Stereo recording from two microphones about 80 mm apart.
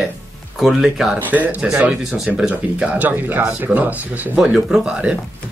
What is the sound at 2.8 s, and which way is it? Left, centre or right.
Speech, centre.